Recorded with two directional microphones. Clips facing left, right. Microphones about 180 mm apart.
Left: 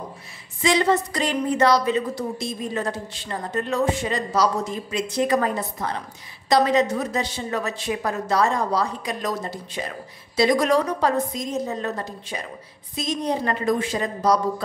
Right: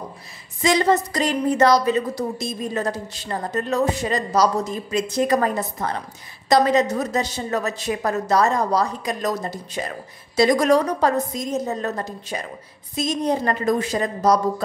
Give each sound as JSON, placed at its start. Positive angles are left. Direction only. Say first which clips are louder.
{"t": 0.6, "sound": "a woman's voice", "louder": "right 2 dB", "side_deg": -40}